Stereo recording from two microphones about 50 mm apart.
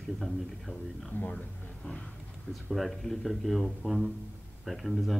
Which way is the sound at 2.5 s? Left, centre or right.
Centre.